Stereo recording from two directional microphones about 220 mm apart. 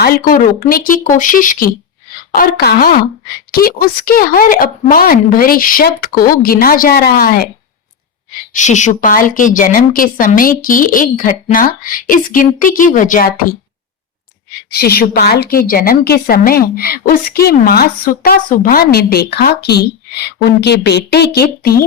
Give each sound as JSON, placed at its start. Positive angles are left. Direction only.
{"t": 0.0, "sound": "a woman's voice", "side_deg": 40}
{"t": 14.7, "sound": "a woman's voice", "side_deg": 45}